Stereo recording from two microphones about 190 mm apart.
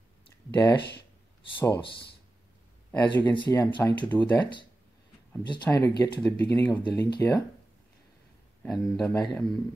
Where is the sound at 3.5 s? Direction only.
15° left (ahead or behind).